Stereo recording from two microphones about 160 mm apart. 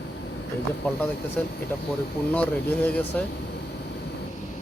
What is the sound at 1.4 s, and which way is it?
Speech, 10° left (ahead or behind).